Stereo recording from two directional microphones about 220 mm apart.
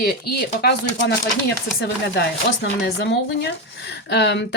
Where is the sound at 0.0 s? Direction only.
45° left (ahead or behind).